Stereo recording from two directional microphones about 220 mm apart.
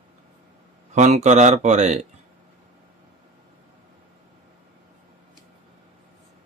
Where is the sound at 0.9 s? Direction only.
30° right (ahead or behind).